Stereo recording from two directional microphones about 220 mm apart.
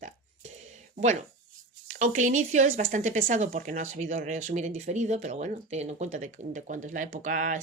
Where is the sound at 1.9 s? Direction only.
35° right (ahead or behind).